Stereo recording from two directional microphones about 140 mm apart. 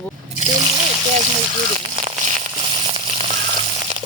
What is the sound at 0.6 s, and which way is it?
Water, 30° right (ahead or behind).